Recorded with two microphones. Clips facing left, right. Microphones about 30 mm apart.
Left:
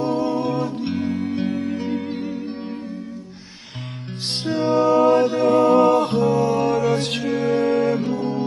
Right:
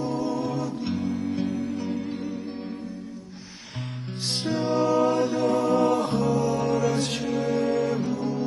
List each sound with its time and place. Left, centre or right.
0.0 s music: left
4.3 s music: left